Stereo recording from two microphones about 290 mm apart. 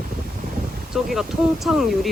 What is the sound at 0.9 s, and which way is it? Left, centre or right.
Speech, centre.